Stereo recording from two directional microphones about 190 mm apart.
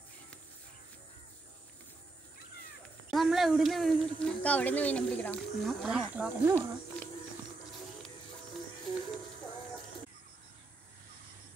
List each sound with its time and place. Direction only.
3.1 s speech: centre (ahead or behind)